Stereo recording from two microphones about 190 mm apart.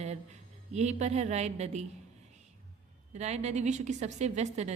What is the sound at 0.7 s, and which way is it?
A woman's voice, 35° right (ahead or behind).